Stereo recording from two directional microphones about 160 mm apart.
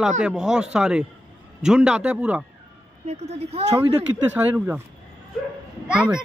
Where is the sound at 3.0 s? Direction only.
40° right (ahead or behind).